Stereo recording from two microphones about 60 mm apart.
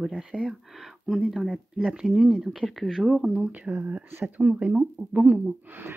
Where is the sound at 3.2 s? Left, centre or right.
Right.